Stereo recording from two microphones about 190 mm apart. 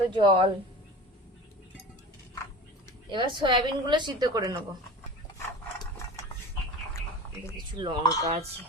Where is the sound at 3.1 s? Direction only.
25° right (ahead or behind).